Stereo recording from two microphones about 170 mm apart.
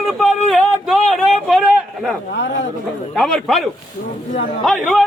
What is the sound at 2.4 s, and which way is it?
Speech, 90° left.